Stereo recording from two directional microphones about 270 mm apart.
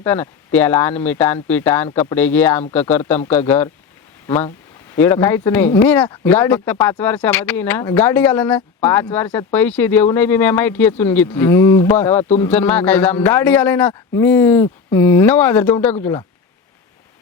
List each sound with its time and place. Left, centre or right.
0.0 s speech: centre
4.9 s speech: centre